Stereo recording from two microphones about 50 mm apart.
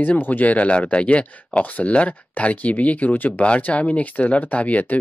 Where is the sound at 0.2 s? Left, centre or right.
Left.